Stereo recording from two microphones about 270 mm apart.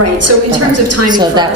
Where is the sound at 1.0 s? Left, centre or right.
Centre.